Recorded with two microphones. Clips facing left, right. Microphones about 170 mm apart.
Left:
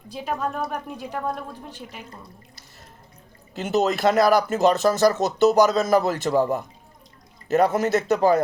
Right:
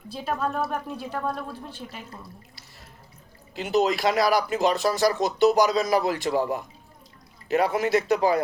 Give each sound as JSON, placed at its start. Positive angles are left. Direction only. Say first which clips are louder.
{"t": 0.7, "sound": "speech", "louder": "even", "side_deg": 15}
{"t": 3.5, "sound": "speech", "louder": "left 1 dB", "side_deg": 45}